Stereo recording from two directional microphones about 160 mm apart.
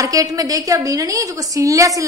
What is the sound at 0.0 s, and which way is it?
A woman's voice, 20° right (ahead or behind).